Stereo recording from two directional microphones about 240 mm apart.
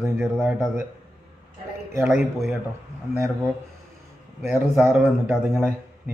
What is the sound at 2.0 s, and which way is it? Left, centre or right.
Speech, centre.